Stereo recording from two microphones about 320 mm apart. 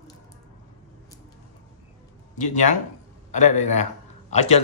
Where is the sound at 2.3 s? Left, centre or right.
Left.